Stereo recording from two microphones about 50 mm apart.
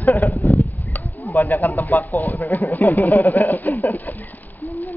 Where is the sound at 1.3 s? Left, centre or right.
Left.